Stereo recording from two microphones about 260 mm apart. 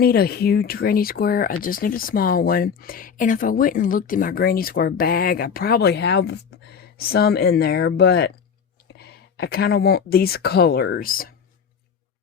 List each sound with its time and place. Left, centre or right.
0.0 s speech: left